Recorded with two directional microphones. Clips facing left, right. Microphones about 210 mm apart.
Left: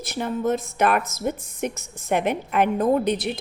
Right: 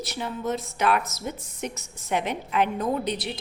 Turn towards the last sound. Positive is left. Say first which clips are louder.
# left 6 dB
turn(degrees=50)  # may be behind; listen again after turning